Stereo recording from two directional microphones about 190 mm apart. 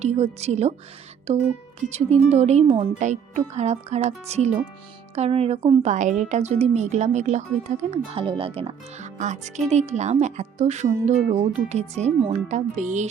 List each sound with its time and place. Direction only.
0.0 s a woman's voice: 35° right (ahead or behind)
1.8 s a woman's voice: 35° right (ahead or behind)